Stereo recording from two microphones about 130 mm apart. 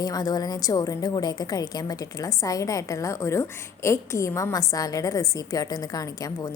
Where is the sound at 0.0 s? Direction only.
30° left (ahead or behind).